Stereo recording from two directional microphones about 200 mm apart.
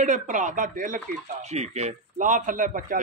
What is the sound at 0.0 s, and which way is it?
A man's voice, 40° right (ahead or behind).